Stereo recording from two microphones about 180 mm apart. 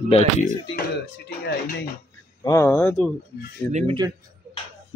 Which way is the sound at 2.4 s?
15° left (ahead or behind).